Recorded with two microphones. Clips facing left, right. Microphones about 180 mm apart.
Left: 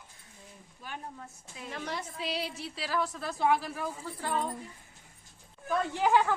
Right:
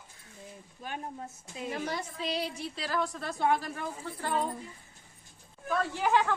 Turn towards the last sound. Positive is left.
turn(degrees=10)  # may be behind; listen again after turning